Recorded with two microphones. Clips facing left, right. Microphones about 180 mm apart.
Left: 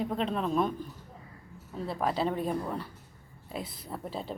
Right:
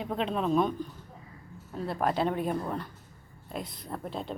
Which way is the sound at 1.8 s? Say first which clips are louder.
Right 2 dB; centre (ahead or behind).